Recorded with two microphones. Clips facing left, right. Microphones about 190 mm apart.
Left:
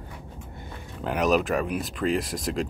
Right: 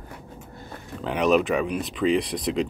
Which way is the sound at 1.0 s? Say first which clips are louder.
Right 2 dB; 5° left (ahead or behind).